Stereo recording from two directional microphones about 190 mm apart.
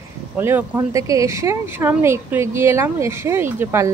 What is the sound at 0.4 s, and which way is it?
Speech, 10° right (ahead or behind).